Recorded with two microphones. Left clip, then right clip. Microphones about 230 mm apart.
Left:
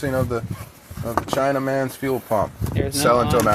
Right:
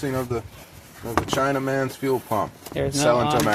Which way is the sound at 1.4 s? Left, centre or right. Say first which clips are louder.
Left 4 dB; left.